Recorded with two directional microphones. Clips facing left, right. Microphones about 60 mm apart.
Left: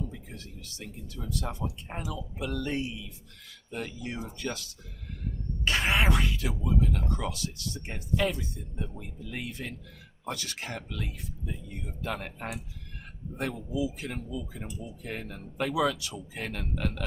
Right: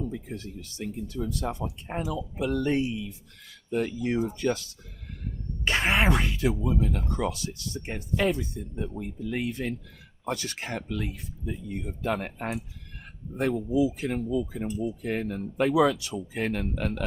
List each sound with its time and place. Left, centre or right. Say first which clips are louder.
0.3 s speech: right 7 dB; right
5.6 s speech: right 3 dB; right